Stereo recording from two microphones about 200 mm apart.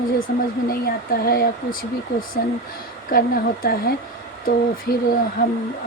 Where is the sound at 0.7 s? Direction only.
50° left (ahead or behind).